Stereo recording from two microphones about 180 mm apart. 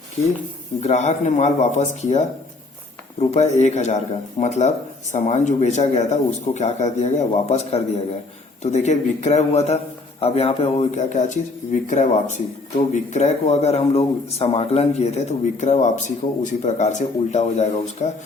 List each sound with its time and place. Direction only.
0.8 s speech: 40° left (ahead or behind)